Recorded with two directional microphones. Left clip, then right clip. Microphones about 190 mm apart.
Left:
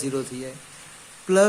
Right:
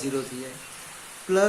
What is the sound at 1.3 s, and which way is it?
Speech, 55° left (ahead or behind).